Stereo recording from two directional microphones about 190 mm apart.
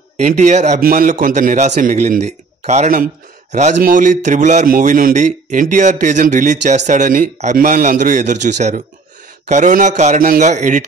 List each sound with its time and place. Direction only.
0.2 s a man's voice: 40° right (ahead or behind)